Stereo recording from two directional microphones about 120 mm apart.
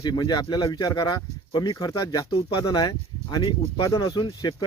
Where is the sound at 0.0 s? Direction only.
35° left (ahead or behind).